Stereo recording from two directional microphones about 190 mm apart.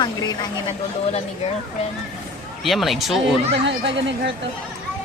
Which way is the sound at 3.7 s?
70° right (ahead or behind).